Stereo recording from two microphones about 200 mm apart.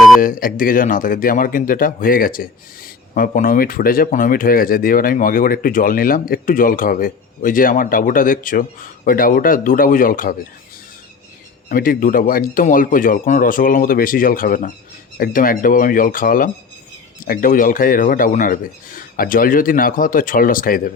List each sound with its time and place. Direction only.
0.2 s speech: 45° left (ahead or behind)
11.7 s speech: 45° left (ahead or behind)